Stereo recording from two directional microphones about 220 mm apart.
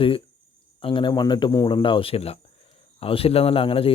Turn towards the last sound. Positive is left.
turn(degrees=25)  # may be behind; listen again after turning